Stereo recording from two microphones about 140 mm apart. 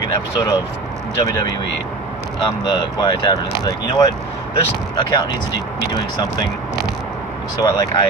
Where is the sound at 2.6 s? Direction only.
30° left (ahead or behind).